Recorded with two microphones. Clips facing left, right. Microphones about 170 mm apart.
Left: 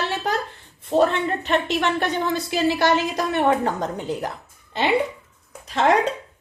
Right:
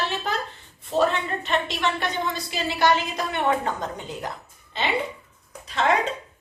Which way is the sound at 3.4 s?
50° left (ahead or behind).